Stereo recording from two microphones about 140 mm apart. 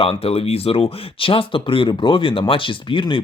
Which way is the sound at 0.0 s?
40° left (ahead or behind).